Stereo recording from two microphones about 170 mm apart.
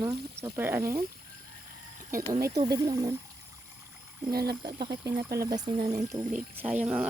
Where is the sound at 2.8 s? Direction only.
20° right (ahead or behind).